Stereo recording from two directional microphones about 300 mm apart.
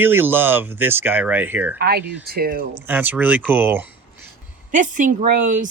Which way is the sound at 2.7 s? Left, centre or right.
Centre.